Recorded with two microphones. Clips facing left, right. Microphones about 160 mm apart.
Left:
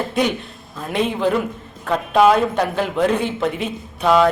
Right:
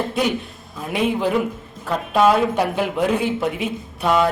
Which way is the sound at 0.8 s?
5° right (ahead or behind).